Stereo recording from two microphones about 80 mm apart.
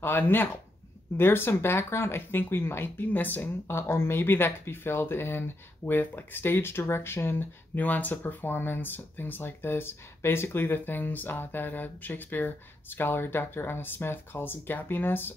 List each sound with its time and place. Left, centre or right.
0.0 s speech: left